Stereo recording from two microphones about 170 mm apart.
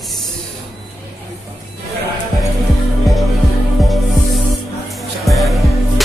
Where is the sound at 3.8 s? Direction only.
Centre (ahead or behind).